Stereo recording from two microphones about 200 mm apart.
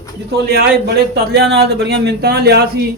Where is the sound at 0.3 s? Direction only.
50° right (ahead or behind).